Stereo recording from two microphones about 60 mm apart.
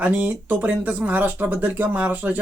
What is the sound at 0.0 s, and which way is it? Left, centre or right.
Speech, right.